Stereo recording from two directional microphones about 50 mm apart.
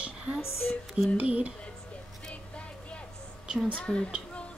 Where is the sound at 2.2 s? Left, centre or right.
Left.